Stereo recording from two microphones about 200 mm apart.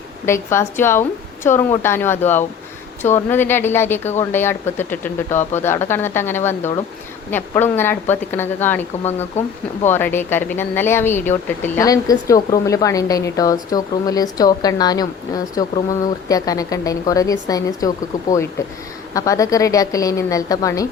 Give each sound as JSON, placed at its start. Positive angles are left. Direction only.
{"t": 0.3, "sound": "speech", "side_deg": 15}
{"t": 9.9, "sound": "speech", "side_deg": 10}